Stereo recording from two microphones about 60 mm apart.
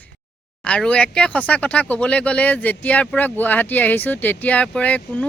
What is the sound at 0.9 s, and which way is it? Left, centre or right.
Speech, centre.